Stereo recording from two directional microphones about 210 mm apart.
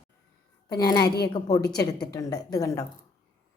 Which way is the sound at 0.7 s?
20° left (ahead or behind).